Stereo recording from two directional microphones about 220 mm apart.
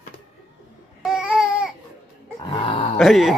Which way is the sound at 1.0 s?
Centre (ahead or behind).